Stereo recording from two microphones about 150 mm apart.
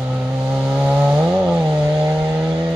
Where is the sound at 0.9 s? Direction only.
5° right (ahead or behind).